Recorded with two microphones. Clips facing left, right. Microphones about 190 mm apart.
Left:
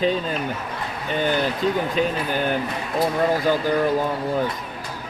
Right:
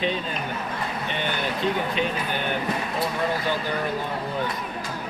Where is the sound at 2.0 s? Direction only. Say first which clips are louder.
Left 6 dB; 40° left (ahead or behind).